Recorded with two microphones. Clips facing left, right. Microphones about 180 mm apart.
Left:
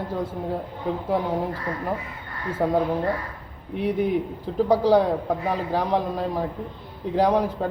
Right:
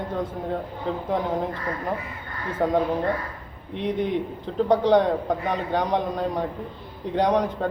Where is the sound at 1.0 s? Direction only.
5° left (ahead or behind).